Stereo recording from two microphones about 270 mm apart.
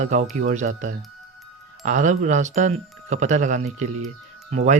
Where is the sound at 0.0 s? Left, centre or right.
Right.